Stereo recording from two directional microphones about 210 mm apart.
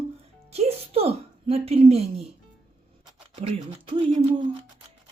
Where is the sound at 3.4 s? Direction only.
25° right (ahead or behind).